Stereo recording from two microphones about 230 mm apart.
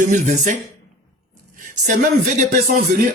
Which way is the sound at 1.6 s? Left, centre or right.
Right.